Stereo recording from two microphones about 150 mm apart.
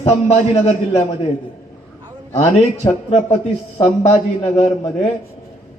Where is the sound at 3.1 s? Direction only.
50° left (ahead or behind).